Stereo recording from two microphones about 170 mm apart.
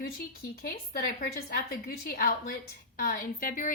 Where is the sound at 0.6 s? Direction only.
60° left (ahead or behind).